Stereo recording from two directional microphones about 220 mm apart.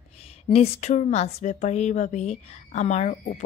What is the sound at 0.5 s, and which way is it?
Speech, 30° left (ahead or behind).